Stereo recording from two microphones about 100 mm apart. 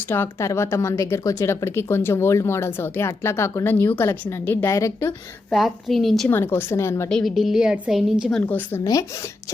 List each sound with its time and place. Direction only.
0.1 s a woman's voice: 25° left (ahead or behind)
5.5 s a woman's voice: centre (ahead or behind)
6.2 s a woman's voice: 20° left (ahead or behind)
7.1 s a woman's voice: centre (ahead or behind)
8.4 s speech: 20° left (ahead or behind)
8.8 s speech: 30° left (ahead or behind)